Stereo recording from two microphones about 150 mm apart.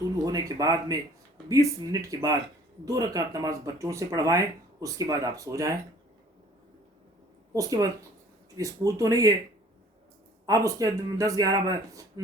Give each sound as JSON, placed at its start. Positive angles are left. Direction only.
{"t": 0.3, "sound": "speech", "side_deg": -25}
{"t": 7.5, "sound": "speech", "side_deg": -20}
{"t": 10.4, "sound": "speech", "side_deg": -20}